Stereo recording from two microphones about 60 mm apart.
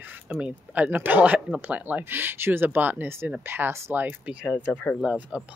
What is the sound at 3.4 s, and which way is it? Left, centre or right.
Speech, right.